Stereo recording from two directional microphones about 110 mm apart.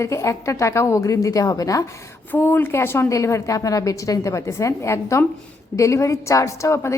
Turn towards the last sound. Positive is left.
turn(degrees=25)  # may be behind; listen again after turning